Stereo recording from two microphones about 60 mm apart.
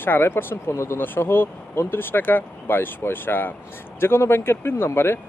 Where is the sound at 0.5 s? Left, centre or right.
Left.